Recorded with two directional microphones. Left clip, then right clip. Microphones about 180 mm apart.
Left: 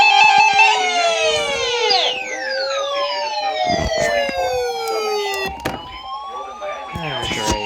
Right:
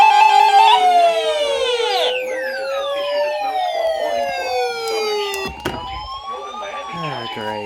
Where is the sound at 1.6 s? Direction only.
60° right (ahead or behind).